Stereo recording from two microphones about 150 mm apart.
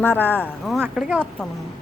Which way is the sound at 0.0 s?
10° left (ahead or behind).